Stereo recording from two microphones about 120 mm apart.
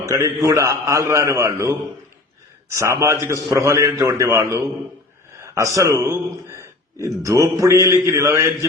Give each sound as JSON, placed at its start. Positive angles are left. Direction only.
{"t": 0.0, "sound": "a man's voice", "side_deg": -25}